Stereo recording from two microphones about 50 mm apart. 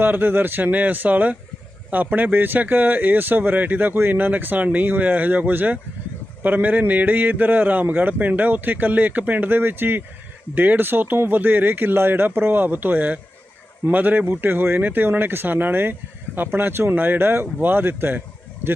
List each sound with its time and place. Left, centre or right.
0.0 s speech: right